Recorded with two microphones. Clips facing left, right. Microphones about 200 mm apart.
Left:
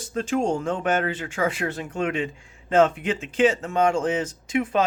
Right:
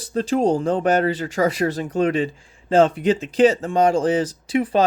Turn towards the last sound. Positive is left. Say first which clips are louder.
# right 4 dB
turn(degrees=-35)  # may be behind; listen again after turning